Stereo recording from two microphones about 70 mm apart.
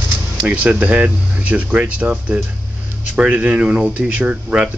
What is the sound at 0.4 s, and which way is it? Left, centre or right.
Speech, centre.